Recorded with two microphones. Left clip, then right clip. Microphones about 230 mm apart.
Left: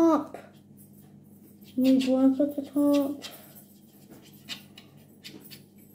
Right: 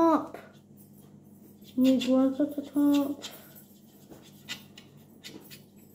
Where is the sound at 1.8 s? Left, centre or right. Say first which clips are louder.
Left 1 dB; centre.